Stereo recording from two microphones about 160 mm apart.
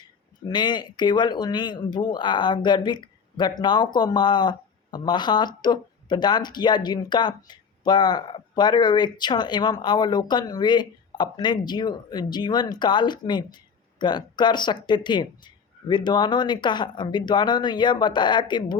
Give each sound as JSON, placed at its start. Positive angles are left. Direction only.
{"t": 0.4, "sound": "speech", "side_deg": 25}